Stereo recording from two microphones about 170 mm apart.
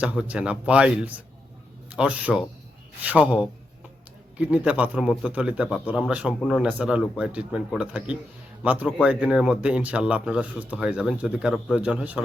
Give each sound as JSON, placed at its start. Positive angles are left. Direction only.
{"t": 0.0, "sound": "a man's voice", "side_deg": -10}